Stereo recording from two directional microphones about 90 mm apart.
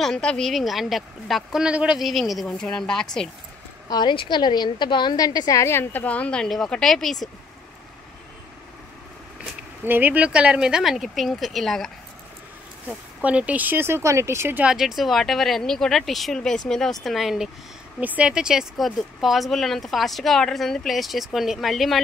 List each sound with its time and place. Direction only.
0.0 s speech: 5° left (ahead or behind)
1.7 s speech: 15° right (ahead or behind)
2.0 s a woman's voice: centre (ahead or behind)
3.9 s a woman's voice: 60° left (ahead or behind); by 6.0 s 25° left (ahead or behind)
6.0 s a woman's voice: 15° left (ahead or behind)
9.8 s speech: 20° right (ahead or behind); by 11.9 s centre (ahead or behind)
12.8 s speech: 15° right (ahead or behind); by 14.6 s 30° right (ahead or behind)
14.6 s speech: 5° right (ahead or behind)
18.0 s speech: 15° right (ahead or behind); by 22.0 s centre (ahead or behind)